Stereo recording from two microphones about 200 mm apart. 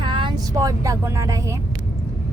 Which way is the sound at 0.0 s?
25° right (ahead or behind).